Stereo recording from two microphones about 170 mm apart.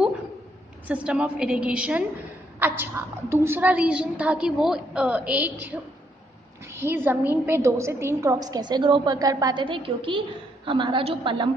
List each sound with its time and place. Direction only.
0.8 s a woman's voice: 5° right (ahead or behind); by 11.5 s 30° right (ahead or behind)